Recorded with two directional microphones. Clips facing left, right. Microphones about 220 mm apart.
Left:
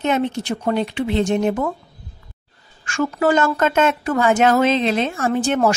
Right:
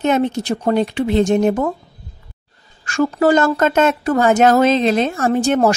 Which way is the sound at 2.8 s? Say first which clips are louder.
Right 4 dB; 35° right (ahead or behind).